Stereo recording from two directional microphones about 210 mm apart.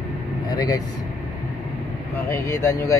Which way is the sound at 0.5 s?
20° left (ahead or behind).